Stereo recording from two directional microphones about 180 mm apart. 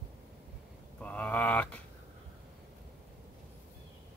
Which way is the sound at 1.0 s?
5° left (ahead or behind).